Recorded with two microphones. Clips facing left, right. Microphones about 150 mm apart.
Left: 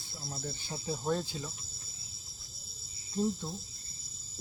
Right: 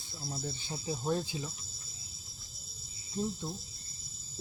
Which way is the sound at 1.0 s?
15° right (ahead or behind).